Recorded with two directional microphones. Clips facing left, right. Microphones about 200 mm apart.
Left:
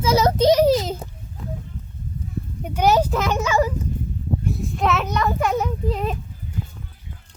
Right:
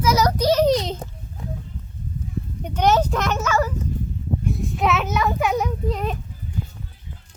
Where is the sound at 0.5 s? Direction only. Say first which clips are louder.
Left 1 dB; 5° left (ahead or behind).